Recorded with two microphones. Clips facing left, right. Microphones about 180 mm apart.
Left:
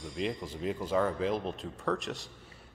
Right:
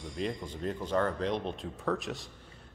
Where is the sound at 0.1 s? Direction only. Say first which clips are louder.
Left 1 dB; centre (ahead or behind).